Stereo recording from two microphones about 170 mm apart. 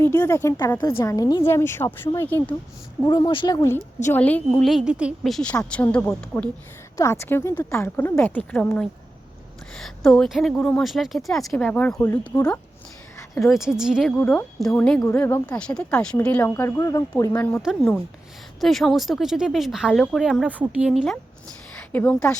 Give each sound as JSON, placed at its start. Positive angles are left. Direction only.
{"t": 0.0, "sound": "speech", "side_deg": 15}
{"t": 3.1, "sound": "speech", "side_deg": 30}
{"t": 3.7, "sound": "speech", "side_deg": 15}
{"t": 13.4, "sound": "speech", "side_deg": 0}
{"t": 15.0, "sound": "speech", "side_deg": 15}
{"t": 17.3, "sound": "speech", "side_deg": 10}
{"t": 18.6, "sound": "speech", "side_deg": 0}
{"t": 21.9, "sound": "speech", "side_deg": 10}